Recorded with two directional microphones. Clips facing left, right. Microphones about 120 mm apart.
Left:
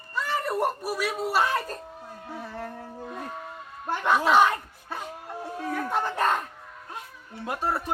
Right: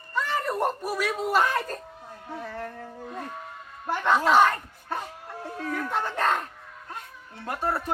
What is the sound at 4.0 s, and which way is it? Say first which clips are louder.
Speech: even; 10° left (ahead or behind).